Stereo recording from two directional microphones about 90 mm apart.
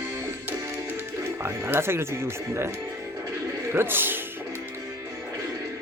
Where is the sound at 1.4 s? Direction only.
30° right (ahead or behind).